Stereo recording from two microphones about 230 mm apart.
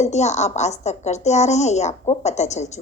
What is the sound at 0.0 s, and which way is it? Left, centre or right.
A woman's voice, left.